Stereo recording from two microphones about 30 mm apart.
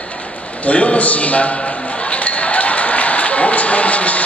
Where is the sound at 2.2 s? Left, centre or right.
Left.